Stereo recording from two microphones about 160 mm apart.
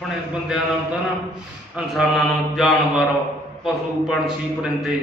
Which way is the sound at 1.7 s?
Centre (ahead or behind).